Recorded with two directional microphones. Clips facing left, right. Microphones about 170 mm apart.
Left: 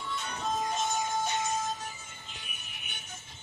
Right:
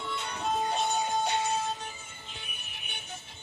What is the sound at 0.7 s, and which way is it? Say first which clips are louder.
Music: right 2 dB; 65° right (ahead or behind).